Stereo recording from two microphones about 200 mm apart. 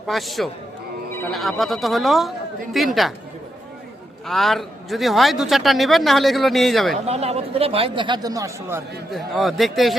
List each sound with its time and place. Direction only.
0.1 s a man's voice: centre (ahead or behind)
4.3 s a man's voice: centre (ahead or behind)
6.9 s speech: 30° right (ahead or behind); by 8.8 s 15° right (ahead or behind)
9.1 s a man's voice: centre (ahead or behind)